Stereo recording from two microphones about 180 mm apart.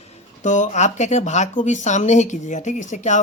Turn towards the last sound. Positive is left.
turn(degrees=40)  # may be behind; listen again after turning